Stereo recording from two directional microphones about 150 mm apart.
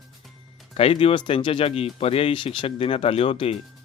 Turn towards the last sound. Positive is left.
turn(degrees=40)  # may be behind; listen again after turning